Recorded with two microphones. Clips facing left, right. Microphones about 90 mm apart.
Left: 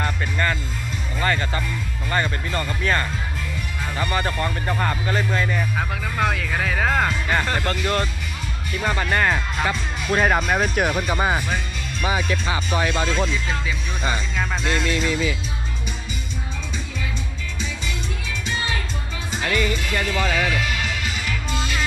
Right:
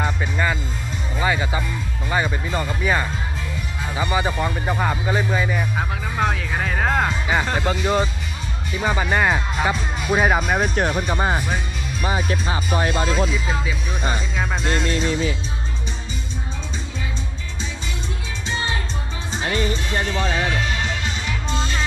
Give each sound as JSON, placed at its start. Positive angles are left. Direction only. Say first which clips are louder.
{"t": 0.0, "sound": "music", "louder": "right 1 dB", "side_deg": -10}
{"t": 2.0, "sound": "speech", "louder": "right 1 dB", "side_deg": -10}
{"t": 14.9, "sound": "speech", "louder": "right 1 dB", "side_deg": -35}
{"t": 19.3, "sound": "music", "louder": "even", "side_deg": -30}